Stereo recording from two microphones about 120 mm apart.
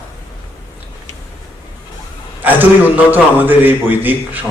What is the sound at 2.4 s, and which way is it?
A man's voice, 15° right (ahead or behind).